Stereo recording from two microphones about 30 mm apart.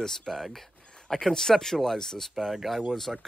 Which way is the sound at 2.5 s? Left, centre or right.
Centre.